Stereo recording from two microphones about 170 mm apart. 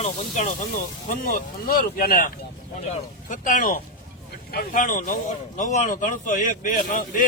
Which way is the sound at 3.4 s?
50° left (ahead or behind).